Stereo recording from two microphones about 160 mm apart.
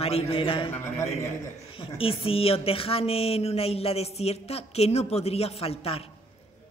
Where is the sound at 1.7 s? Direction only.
35° left (ahead or behind).